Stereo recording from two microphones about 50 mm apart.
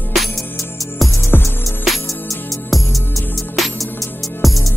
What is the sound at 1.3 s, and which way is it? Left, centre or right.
Music, left.